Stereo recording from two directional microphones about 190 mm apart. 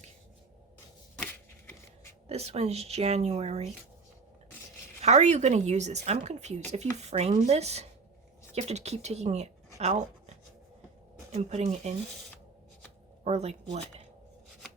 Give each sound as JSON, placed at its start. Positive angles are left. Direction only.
{"t": 1.1, "sound": "a sound", "side_deg": 10}
{"t": 2.2, "sound": "speech", "side_deg": -35}
{"t": 5.0, "sound": "speech", "side_deg": -40}
{"t": 13.2, "sound": "speech", "side_deg": -35}